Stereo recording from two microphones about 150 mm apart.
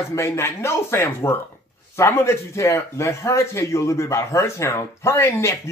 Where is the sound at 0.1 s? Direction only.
15° left (ahead or behind).